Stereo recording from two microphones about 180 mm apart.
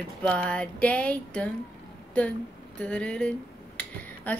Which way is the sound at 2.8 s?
5° left (ahead or behind).